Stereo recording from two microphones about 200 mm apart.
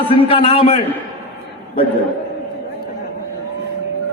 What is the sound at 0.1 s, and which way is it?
Speech, 30° left (ahead or behind).